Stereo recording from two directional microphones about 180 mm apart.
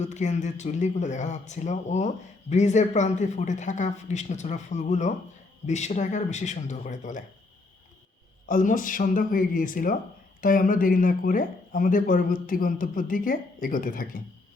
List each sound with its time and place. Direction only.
0.0 s speech: 40° left (ahead or behind)
8.4 s speech: 45° left (ahead or behind)